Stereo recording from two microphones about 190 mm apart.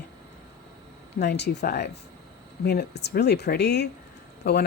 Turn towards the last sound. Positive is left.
turn(degrees=60)  # may be behind; listen again after turning